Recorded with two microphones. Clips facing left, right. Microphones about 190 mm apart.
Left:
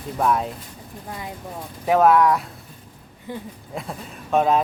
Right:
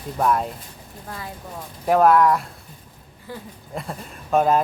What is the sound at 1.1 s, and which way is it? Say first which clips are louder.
Speech: left 1 dB; 20° left (ahead or behind).